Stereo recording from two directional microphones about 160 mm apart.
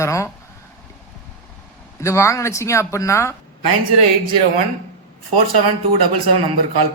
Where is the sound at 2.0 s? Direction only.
20° left (ahead or behind).